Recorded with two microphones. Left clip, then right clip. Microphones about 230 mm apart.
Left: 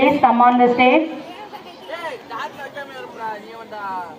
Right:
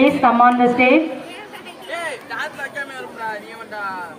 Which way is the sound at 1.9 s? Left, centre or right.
Right.